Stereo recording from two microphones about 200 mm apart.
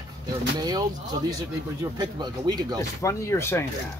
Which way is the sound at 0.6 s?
20° right (ahead or behind).